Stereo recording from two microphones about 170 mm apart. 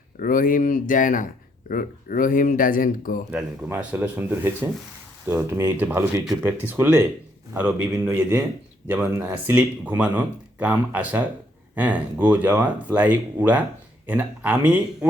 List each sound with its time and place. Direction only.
0.2 s speech: 55° left (ahead or behind)
3.3 s speech: 5° right (ahead or behind)